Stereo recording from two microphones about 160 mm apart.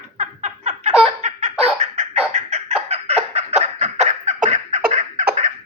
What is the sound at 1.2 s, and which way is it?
Laughter, 50° right (ahead or behind).